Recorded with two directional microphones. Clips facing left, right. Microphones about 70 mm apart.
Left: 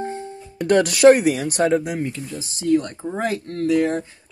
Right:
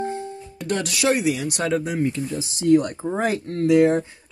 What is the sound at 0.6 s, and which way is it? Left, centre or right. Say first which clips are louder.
Speech: left 9 dB; left.